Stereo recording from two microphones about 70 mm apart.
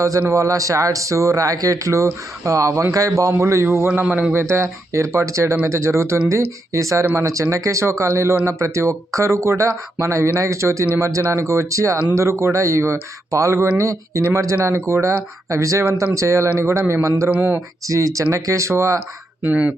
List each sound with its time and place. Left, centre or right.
0.0 s speech: right
3.8 s speech: right
4.3 s speech: right
15.4 s speech: right
17.3 s speech: right
17.8 s speech: right
19.4 s speech: right